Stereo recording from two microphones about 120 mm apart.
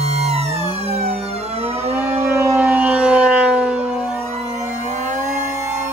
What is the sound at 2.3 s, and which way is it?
Civil defense siren, 20° right (ahead or behind).